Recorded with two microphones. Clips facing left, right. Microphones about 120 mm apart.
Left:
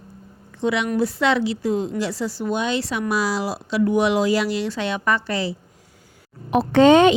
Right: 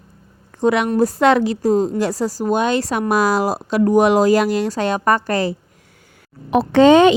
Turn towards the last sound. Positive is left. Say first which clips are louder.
# right 3 dB
turn(degrees=-90)